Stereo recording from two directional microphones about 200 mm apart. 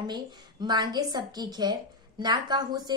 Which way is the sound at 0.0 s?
20° right (ahead or behind).